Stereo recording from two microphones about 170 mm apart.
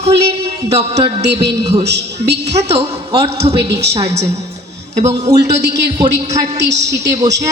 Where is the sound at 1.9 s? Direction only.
80° right.